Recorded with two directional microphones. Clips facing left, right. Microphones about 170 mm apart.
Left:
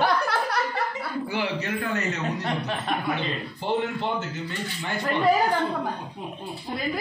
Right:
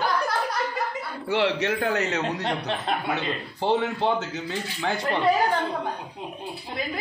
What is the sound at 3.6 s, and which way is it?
Speech, 90° right.